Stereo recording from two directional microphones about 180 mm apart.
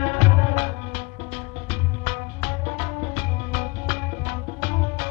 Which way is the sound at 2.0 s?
40° right (ahead or behind).